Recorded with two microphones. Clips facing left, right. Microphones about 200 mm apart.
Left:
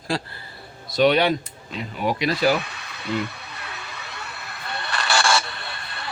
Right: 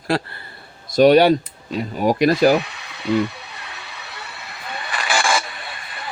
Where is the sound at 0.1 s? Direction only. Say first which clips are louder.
Right 5 dB; 65° right (ahead or behind).